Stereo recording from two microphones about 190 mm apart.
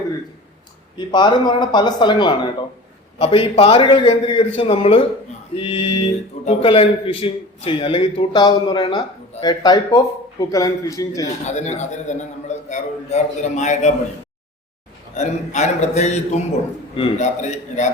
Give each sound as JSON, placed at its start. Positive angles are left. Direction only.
{"t": 0.9, "sound": "a man's voice", "side_deg": 25}
{"t": 11.4, "sound": "a man's voice", "side_deg": 40}
{"t": 15.1, "sound": "a man's voice", "side_deg": 40}